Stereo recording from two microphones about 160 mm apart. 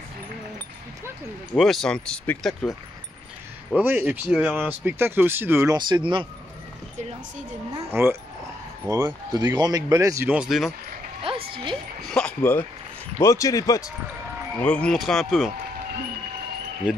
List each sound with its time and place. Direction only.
1.6 s speech: centre (ahead or behind)
3.7 s speech: 10° right (ahead or behind)
5.8 s speech: 30° right (ahead or behind)
7.0 s a woman's voice: 45° right (ahead or behind)
7.7 s speech: 15° right (ahead or behind)
10.3 s speech: 5° right (ahead or behind)
11.3 s music: 35° right (ahead or behind)
12.1 s speech: 5° left (ahead or behind)
14.6 s speech: 5° left (ahead or behind)